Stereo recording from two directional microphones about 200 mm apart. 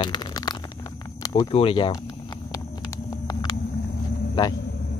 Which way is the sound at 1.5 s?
25° left (ahead or behind).